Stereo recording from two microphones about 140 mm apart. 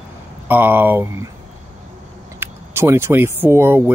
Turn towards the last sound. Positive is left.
turn(degrees=-15)  # may be behind; listen again after turning